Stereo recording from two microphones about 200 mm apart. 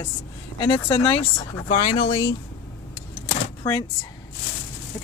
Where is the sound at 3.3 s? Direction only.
20° left (ahead or behind).